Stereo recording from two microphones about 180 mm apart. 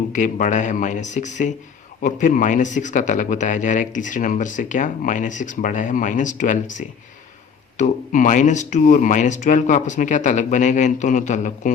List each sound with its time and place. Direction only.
0.1 s a man's voice: 45° left (ahead or behind)